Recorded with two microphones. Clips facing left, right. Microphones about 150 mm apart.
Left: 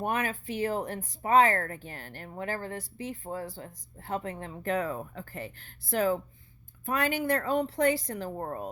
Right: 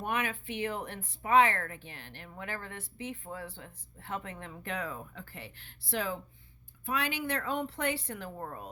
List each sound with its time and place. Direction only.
0.0 s speech: 40° left (ahead or behind)